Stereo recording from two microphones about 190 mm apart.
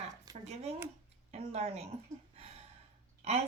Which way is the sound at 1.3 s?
35° right (ahead or behind).